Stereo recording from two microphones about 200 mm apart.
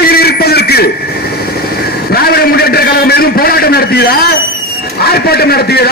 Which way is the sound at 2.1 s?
50° left (ahead or behind).